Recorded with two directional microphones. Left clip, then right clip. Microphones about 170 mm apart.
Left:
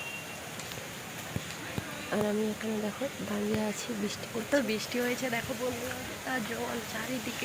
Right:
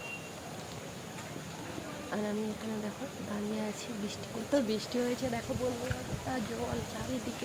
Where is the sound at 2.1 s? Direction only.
30° left (ahead or behind).